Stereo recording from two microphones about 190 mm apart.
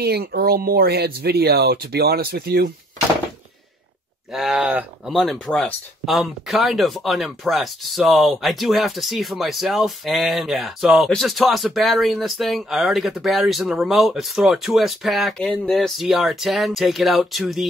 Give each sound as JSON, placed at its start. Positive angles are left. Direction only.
{"t": 0.0, "sound": "speech", "side_deg": -55}
{"t": 4.3, "sound": "speech", "side_deg": 0}